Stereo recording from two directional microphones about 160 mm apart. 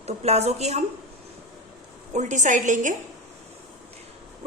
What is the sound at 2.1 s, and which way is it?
Speech, 50° right (ahead or behind).